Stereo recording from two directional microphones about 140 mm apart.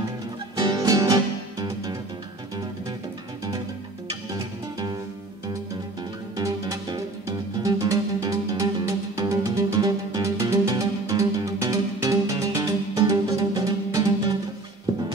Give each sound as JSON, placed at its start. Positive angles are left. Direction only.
{"t": 0.6, "sound": "music", "side_deg": -25}
{"t": 4.1, "sound": "music", "side_deg": -30}
{"t": 6.3, "sound": "music", "side_deg": -25}